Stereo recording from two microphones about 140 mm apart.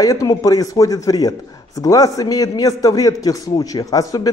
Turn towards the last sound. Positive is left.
turn(degrees=25)  # may be behind; listen again after turning